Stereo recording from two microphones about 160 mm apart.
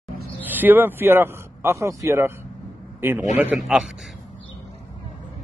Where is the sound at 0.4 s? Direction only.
10° right (ahead or behind).